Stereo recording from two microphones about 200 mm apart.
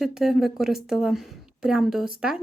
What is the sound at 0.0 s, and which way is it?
A woman's voice, centre (ahead or behind).